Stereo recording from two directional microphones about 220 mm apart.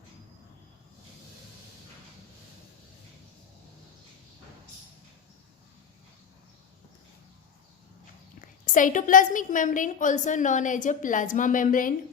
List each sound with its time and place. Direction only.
8.4 s a woman's voice: 35° left (ahead or behind)